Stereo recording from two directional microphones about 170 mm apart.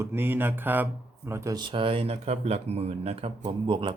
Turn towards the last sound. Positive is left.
turn(degrees=-30)  # may be behind; listen again after turning